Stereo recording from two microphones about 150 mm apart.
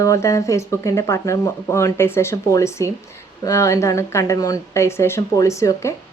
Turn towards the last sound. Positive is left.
turn(degrees=20)  # may be behind; listen again after turning